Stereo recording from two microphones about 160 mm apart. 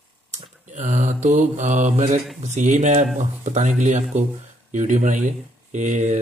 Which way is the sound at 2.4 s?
50° right (ahead or behind).